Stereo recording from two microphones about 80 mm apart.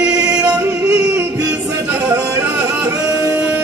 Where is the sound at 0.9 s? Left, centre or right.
Right.